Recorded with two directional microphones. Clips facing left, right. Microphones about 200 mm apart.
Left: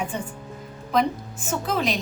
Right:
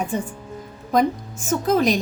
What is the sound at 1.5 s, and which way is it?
Speech, 45° right (ahead or behind).